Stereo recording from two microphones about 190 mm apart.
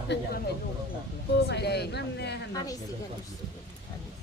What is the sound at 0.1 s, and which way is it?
Speech, 65° left (ahead or behind).